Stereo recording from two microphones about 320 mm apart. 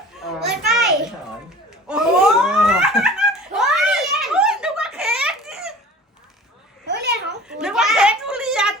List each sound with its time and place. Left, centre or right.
0.3 s children playing: centre
1.9 s belly laugh: centre
6.8 s babbling: right
7.4 s a sound: centre